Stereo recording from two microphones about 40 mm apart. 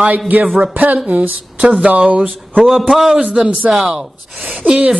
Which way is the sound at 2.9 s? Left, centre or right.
Centre.